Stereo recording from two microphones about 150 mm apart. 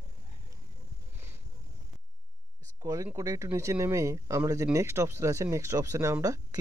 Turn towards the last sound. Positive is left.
turn(degrees=-20)  # may be behind; listen again after turning